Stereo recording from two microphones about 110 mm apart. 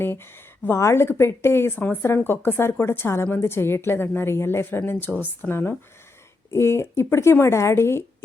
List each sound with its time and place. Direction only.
0.0 s a woman's voice: 20° left (ahead or behind)